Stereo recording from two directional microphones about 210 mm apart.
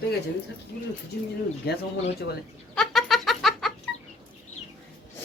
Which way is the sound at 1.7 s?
50° left (ahead or behind).